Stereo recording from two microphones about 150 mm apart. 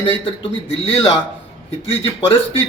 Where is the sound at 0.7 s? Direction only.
40° left (ahead or behind).